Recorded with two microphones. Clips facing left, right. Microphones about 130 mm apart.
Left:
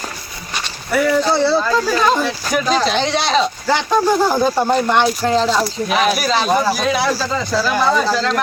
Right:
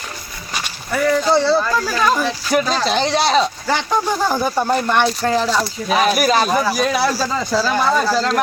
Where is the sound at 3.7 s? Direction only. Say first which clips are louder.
Left 4 dB; 15° left (ahead or behind).